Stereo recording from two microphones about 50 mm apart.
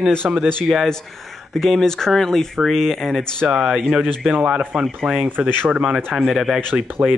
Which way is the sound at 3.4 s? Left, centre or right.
Centre.